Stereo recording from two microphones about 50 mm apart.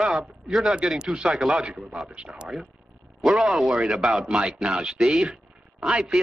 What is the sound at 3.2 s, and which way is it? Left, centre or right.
Speech, centre.